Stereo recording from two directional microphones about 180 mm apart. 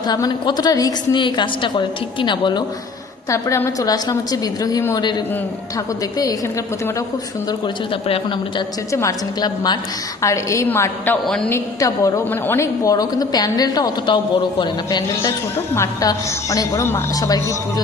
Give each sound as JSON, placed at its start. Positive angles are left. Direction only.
{"t": 0.1, "sound": "a woman's voice", "side_deg": 20}
{"t": 8.0, "sound": "a woman's voice", "side_deg": 30}
{"t": 8.9, "sound": "a woman's voice", "side_deg": 15}
{"t": 11.5, "sound": "a woman's voice", "side_deg": 20}